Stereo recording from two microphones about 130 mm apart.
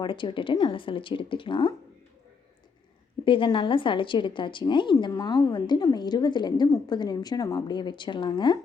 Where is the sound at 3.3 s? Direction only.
40° left (ahead or behind).